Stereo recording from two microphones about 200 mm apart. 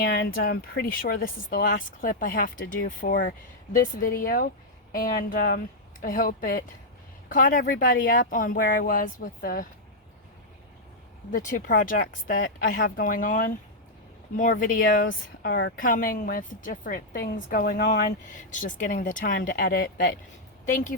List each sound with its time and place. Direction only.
0.0 s speech: 50° left (ahead or behind)
11.3 s speech: 40° left (ahead or behind)
18.2 s speech: 40° left (ahead or behind)